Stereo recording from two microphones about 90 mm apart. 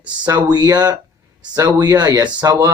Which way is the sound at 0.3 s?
50° right (ahead or behind).